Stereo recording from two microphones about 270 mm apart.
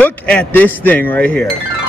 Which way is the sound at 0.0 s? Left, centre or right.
Centre.